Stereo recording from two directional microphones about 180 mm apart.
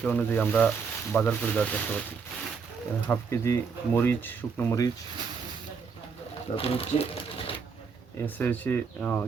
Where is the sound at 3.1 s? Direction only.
15° left (ahead or behind).